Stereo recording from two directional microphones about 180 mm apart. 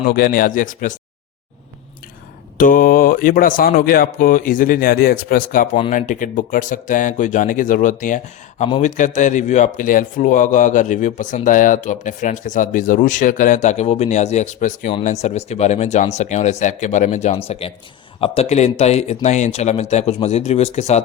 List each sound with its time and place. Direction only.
0.1 s speech: 55° left (ahead or behind)
2.6 s speech: 50° left (ahead or behind)